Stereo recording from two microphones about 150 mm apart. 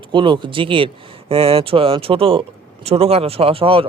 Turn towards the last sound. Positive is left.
turn(degrees=-40)  # may be behind; listen again after turning